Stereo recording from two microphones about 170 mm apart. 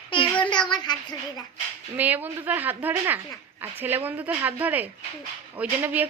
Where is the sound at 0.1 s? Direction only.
30° left (ahead or behind).